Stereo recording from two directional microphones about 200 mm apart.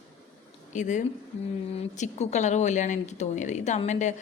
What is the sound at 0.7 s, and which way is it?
Speech, 35° left (ahead or behind).